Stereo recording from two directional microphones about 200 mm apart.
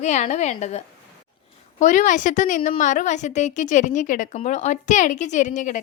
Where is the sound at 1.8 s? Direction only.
40° left (ahead or behind).